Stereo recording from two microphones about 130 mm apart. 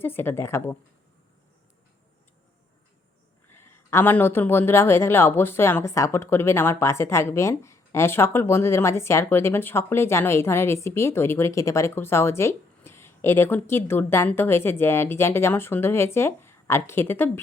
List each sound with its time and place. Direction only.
0.0 s a woman's voice: 15° left (ahead or behind)
3.5 s speech: 20° left (ahead or behind)